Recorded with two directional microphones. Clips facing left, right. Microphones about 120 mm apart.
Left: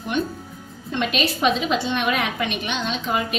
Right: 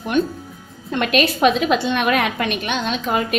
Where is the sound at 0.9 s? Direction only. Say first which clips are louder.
Right 5 dB; 60° right (ahead or behind).